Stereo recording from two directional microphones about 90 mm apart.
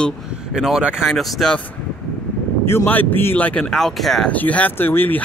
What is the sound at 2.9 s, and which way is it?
Speech, 20° left (ahead or behind).